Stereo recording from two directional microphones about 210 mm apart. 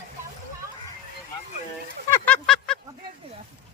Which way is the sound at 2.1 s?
5° left (ahead or behind).